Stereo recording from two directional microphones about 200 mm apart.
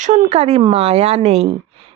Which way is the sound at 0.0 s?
35° right (ahead or behind).